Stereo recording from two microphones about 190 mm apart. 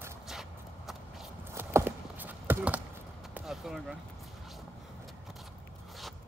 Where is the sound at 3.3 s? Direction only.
Centre (ahead or behind).